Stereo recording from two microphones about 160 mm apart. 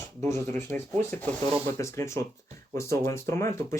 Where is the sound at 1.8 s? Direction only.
20° left (ahead or behind).